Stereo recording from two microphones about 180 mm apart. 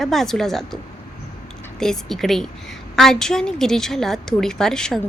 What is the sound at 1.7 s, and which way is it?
A woman's voice, 5° left (ahead or behind).